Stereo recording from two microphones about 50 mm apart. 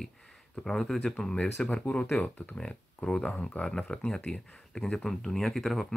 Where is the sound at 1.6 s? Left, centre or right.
Left.